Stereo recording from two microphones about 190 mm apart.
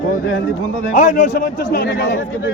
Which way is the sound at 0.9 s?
40° left (ahead or behind).